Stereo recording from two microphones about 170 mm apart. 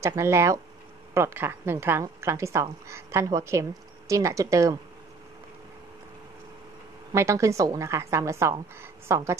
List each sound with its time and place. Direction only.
0.0 s a woman's voice: 15° right (ahead or behind)
7.1 s a woman's voice: 15° right (ahead or behind)